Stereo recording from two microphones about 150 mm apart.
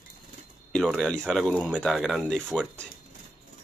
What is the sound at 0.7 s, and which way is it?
Speech, centre (ahead or behind).